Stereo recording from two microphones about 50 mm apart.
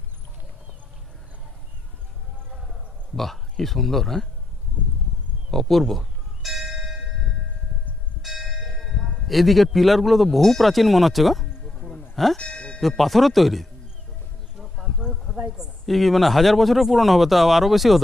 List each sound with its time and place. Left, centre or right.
2.5 s clip-clop: centre
3.2 s speech: centre
5.5 s bell: centre
8.2 s church bell: centre
8.5 s bell: centre
8.8 s a sound: centre
9.1 s speech: centre
12.4 s music: centre
13.0 s speech: centre
14.6 s a sound: centre
15.9 s speech: centre